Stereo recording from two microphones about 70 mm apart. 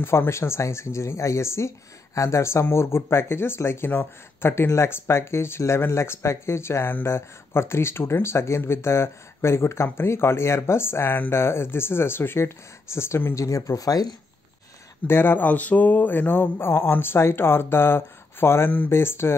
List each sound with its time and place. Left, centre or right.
0.0 s speech: left
15.0 s speech: left